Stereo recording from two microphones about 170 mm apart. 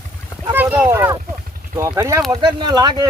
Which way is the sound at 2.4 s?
30° right (ahead or behind).